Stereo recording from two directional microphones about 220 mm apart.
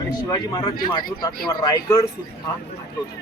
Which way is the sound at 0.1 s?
20° left (ahead or behind).